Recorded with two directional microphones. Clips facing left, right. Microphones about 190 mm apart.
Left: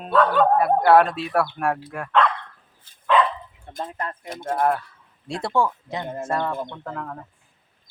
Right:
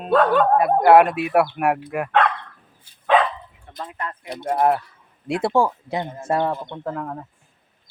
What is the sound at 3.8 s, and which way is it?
Speech, 35° left (ahead or behind).